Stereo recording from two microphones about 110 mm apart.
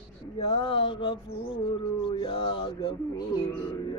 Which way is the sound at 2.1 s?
50° left (ahead or behind).